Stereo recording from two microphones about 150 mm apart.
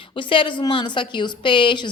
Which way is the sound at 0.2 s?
35° left (ahead or behind).